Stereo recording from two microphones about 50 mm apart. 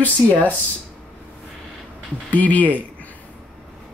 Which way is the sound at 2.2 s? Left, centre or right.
Left.